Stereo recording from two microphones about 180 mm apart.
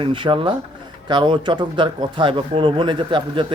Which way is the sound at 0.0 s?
30° right (ahead or behind).